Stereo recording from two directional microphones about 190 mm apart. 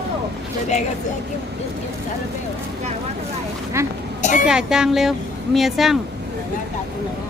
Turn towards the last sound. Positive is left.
turn(degrees=0)  # may be behind; listen again after turning